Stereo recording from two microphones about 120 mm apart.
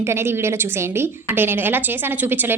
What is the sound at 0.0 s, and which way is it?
A woman's voice, 20° right (ahead or behind).